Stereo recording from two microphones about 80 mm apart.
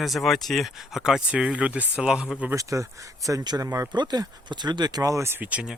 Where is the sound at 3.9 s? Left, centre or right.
Right.